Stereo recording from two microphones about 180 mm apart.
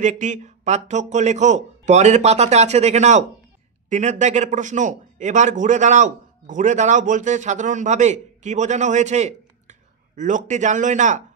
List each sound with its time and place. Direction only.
0.0 s a man's voice: 45° right (ahead or behind)